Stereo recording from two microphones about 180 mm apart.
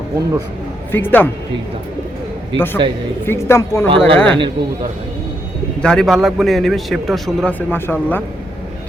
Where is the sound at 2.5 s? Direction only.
10° left (ahead or behind).